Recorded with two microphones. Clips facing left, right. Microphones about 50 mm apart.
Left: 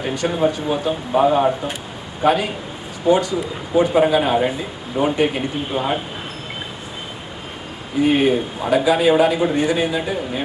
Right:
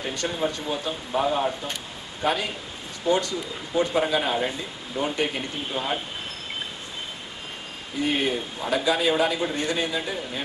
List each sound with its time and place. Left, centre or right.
0.0 s speech: centre
8.0 s speech: left